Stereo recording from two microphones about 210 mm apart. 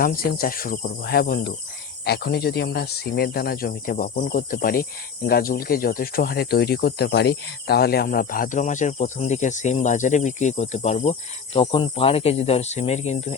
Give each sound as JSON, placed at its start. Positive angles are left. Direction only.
{"t": 0.0, "sound": "speech", "side_deg": 45}